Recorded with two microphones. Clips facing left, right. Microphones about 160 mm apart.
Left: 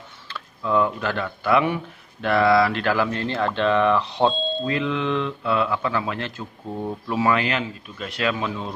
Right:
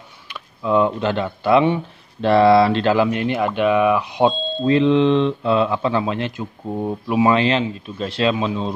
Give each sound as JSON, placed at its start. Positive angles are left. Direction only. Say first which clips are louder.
{"t": 0.3, "sound": "speech", "louder": "right 4 dB", "side_deg": -20}
{"t": 4.3, "sound": "speech", "louder": "right 1 dB", "side_deg": 0}
{"t": 4.6, "sound": "speech", "louder": "right 12 dB", "side_deg": -25}